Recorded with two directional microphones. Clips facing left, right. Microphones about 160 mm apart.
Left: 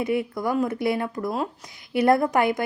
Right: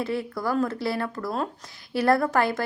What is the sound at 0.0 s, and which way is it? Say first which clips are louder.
A woman's voice: left 3 dB; 20° left (ahead or behind).